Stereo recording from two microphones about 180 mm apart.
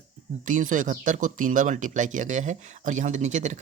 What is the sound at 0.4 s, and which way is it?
Speech, 45° right (ahead or behind).